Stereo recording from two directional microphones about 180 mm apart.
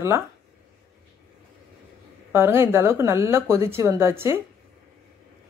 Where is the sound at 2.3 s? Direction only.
15° right (ahead or behind).